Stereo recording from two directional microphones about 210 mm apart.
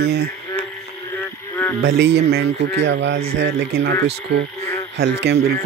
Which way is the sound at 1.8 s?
55° right (ahead or behind).